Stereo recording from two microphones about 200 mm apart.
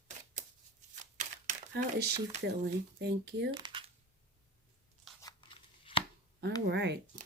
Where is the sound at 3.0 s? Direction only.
60° right (ahead or behind).